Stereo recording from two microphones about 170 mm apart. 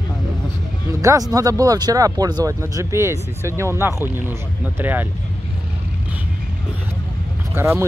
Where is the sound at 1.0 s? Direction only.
20° right (ahead or behind).